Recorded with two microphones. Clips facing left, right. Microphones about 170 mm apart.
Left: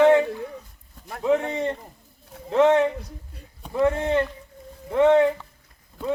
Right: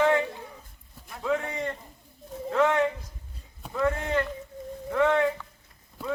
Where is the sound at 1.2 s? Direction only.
25° left (ahead or behind).